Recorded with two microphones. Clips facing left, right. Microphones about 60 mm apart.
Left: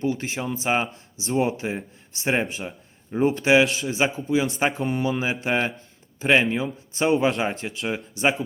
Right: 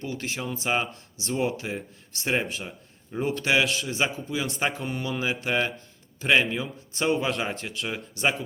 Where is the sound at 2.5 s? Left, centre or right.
Centre.